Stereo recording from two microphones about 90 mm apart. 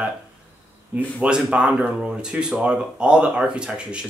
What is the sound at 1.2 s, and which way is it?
Speech, 10° right (ahead or behind).